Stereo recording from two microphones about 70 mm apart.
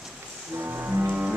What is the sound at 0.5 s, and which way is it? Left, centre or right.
Music, right.